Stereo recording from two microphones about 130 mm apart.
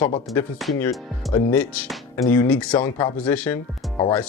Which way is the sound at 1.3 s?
25° left (ahead or behind).